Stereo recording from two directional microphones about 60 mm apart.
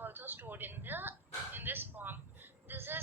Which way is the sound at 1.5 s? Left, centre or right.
Right.